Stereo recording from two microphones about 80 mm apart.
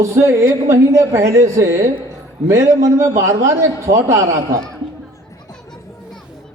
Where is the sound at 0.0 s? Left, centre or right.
Right.